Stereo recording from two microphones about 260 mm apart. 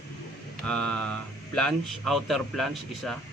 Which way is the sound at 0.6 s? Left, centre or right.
Centre.